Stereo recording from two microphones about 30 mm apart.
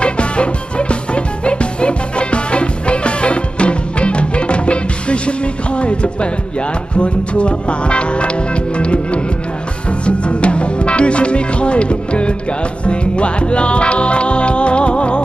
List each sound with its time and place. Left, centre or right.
0.0 s music: left